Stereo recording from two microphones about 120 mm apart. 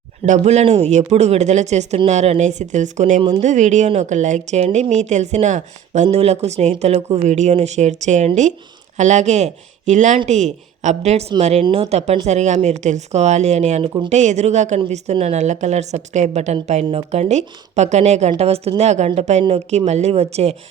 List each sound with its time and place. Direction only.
0.3 s speech: 70° right (ahead or behind); by 3.2 s 85° right
3.2 s speech: 45° right (ahead or behind)
3.4 s speech: 90° right
4.6 s speech: 70° right (ahead or behind); by 10.2 s 85° right
10.2 s speech: 75° right (ahead or behind)
14.1 s speech: 75° right (ahead or behind)